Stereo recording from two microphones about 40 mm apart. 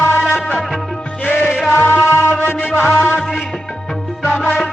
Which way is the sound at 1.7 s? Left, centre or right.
Left.